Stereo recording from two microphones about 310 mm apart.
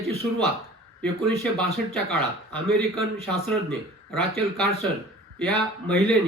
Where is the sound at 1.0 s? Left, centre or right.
Centre.